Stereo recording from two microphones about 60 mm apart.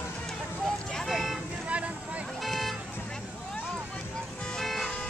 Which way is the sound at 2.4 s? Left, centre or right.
Centre.